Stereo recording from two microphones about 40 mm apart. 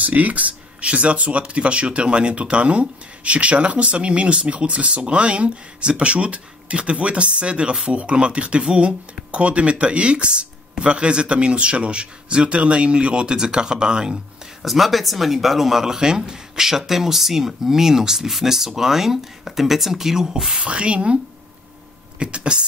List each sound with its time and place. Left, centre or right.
0.0 s speech: right
14.6 s speech: centre
20.7 s speech: right
22.2 s speech: right